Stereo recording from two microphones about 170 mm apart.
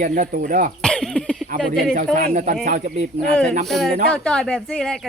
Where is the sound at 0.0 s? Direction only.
55° right (ahead or behind).